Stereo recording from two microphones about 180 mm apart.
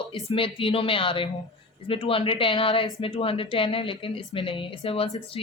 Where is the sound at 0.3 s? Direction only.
30° left (ahead or behind).